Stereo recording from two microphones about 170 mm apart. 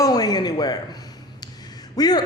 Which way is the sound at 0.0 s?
20° left (ahead or behind).